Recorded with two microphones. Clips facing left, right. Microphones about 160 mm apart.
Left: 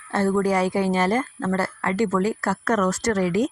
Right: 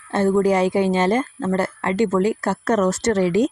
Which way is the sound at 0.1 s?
20° right (ahead or behind).